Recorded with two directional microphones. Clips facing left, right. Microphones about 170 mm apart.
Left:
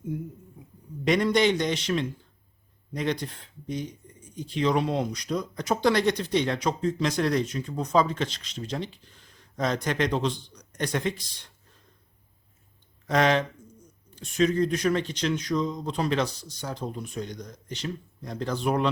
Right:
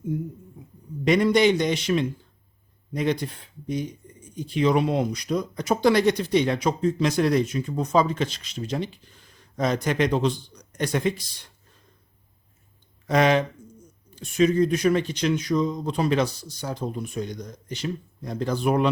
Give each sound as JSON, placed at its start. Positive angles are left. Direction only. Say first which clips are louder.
{"t": 1.0, "sound": "speech", "louder": "right 3 dB", "side_deg": -5}
{"t": 13.1, "sound": "speech", "louder": "right 3 dB", "side_deg": -10}